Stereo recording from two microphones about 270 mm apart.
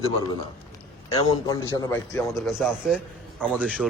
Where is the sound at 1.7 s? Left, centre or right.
Centre.